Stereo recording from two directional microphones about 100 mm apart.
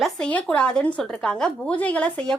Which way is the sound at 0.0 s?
10° left (ahead or behind).